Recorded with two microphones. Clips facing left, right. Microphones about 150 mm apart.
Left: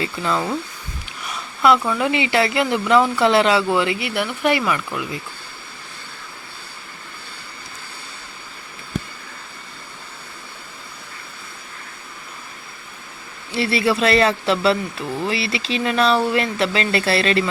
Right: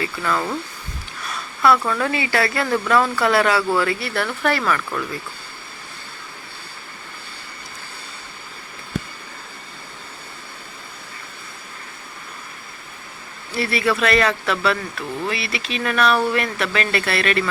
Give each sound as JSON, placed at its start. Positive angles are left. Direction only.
{"t": 0.0, "sound": "speech", "side_deg": 20}
{"t": 13.5, "sound": "speech", "side_deg": 25}